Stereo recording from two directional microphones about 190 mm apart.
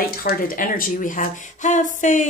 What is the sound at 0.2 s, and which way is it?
Speech, 50° left (ahead or behind).